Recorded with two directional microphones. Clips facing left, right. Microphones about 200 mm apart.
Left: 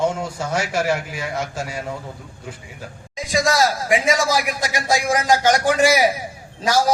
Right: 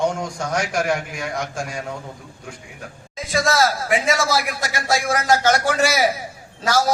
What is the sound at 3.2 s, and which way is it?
A man's voice, 15° left (ahead or behind).